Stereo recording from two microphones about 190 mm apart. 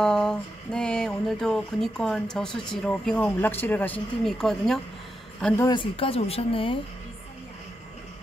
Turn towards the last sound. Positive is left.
turn(degrees=30)  # may be behind; listen again after turning